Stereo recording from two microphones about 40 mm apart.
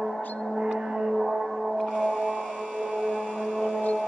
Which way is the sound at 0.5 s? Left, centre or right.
Right.